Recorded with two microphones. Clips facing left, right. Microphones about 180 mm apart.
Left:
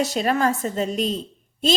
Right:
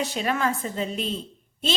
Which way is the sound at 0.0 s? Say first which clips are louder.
Left 5 dB; 40° left (ahead or behind).